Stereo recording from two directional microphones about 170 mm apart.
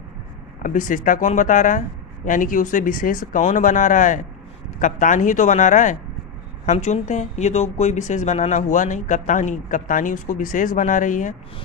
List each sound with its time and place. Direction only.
0.6 s speech: 50° left (ahead or behind)